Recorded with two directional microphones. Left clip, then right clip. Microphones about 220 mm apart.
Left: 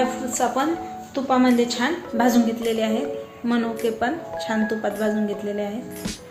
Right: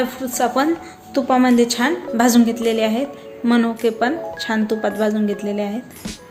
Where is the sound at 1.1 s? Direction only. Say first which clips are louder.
Right 4 dB; 55° right (ahead or behind).